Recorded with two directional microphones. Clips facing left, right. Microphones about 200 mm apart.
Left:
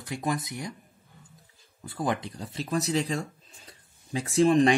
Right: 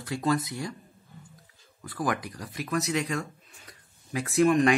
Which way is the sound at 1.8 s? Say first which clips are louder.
Even; 25° left (ahead or behind).